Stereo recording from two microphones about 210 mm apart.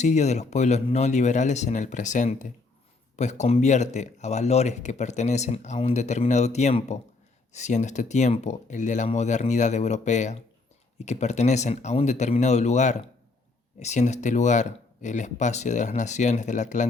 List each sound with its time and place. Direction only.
0.0 s speech: 35° left (ahead or behind)